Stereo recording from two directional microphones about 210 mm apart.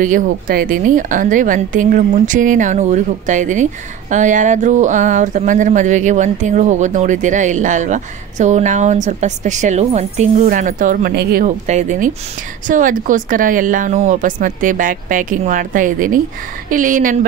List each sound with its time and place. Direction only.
0.0 s speech: 40° right (ahead or behind)